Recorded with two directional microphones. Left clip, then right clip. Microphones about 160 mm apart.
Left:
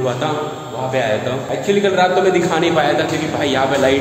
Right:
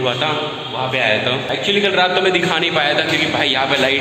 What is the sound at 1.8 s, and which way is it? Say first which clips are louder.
A man's voice: left 2 dB; 10° left (ahead or behind).